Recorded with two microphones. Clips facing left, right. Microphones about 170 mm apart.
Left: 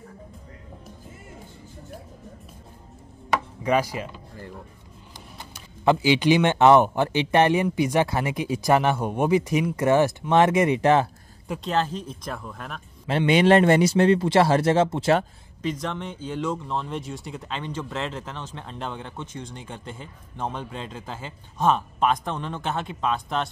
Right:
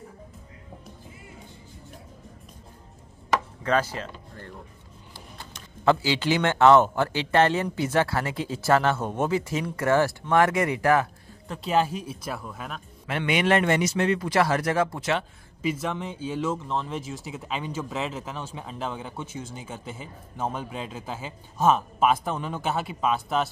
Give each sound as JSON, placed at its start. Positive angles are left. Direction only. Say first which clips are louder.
{"t": 3.6, "sound": "speech", "louder": "left 5 dB", "side_deg": 10}
{"t": 11.6, "sound": "speech", "louder": "right 2 dB", "side_deg": -10}
{"t": 13.0, "sound": "a man's voice", "louder": "left 6 dB", "side_deg": 30}
{"t": 15.6, "sound": "speech", "louder": "right 1 dB", "side_deg": -5}